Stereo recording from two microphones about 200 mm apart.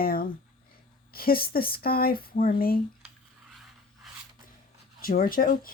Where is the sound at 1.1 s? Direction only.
50° left (ahead or behind).